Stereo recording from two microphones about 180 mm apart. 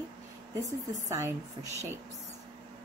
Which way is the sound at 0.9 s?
15° right (ahead or behind).